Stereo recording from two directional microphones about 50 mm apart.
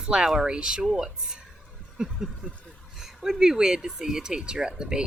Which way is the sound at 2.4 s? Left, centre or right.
Right.